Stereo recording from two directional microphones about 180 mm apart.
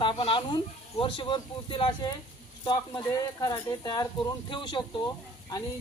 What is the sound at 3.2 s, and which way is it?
Speech, 20° left (ahead or behind).